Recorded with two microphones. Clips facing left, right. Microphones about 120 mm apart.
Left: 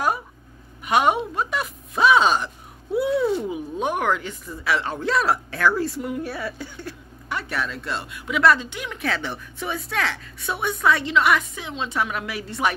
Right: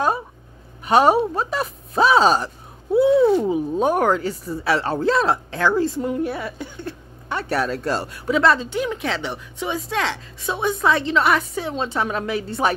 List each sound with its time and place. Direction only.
0.8 s speech: 35° right (ahead or behind)